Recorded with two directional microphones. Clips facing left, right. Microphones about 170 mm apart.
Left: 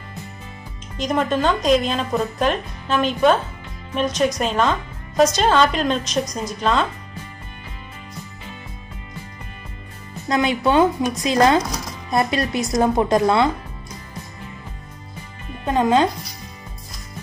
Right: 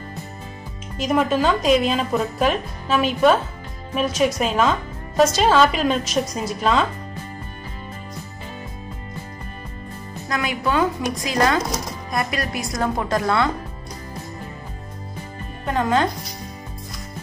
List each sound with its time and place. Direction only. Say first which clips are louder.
0.9 s speech: right 1 dB; 5° right (ahead or behind)
10.2 s a woman's voice: left 5 dB; 25° left (ahead or behind)
15.6 s a woman's voice: left 3 dB; 20° left (ahead or behind)